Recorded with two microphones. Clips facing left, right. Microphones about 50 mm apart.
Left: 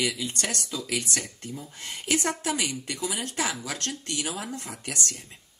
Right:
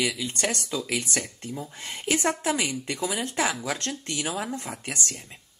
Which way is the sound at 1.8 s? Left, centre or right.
Right.